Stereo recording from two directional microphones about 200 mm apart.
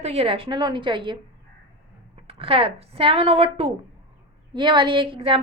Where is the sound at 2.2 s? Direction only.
30° right (ahead or behind).